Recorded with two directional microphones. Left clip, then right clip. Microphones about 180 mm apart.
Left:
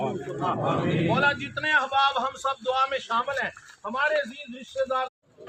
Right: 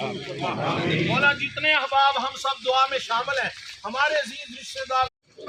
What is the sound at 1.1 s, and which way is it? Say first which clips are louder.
Speech: right 2 dB; 55° left (ahead or behind).